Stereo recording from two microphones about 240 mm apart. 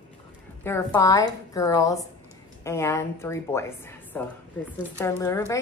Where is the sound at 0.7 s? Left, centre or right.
Centre.